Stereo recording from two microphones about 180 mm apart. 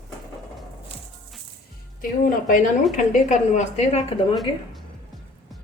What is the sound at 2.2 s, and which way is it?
A woman's voice, 50° left (ahead or behind).